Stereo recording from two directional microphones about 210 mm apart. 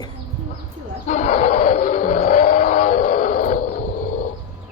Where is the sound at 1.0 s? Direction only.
35° left (ahead or behind).